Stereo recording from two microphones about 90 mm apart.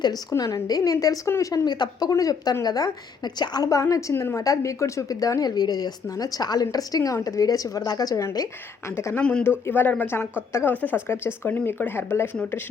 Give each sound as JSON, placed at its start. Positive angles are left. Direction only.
{"t": 0.0, "sound": "a woman's voice", "side_deg": 45}
{"t": 1.6, "sound": "a woman's voice", "side_deg": 50}
{"t": 9.1, "sound": "speech", "side_deg": 10}
{"t": 9.6, "sound": "speech", "side_deg": 20}